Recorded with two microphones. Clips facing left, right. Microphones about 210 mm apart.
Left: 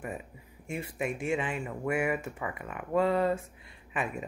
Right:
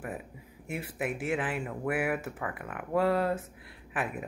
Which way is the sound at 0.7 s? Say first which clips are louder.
Even; 5° right (ahead or behind).